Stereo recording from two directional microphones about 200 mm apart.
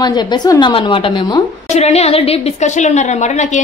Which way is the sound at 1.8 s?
30° left (ahead or behind).